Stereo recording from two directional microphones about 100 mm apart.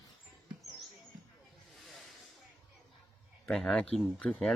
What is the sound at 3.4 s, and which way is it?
Speech, 5° left (ahead or behind).